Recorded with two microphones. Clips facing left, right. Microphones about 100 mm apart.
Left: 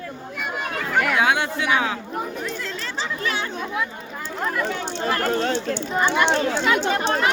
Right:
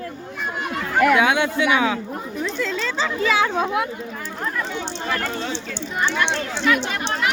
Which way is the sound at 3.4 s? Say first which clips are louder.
Right 6 dB; 90° right.